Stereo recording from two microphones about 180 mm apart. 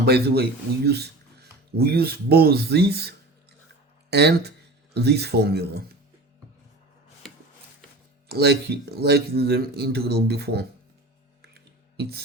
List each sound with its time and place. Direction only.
0.0 s speech: 60° right (ahead or behind)
8.3 s speech: 65° right (ahead or behind)
11.4 s a sound: 60° right (ahead or behind)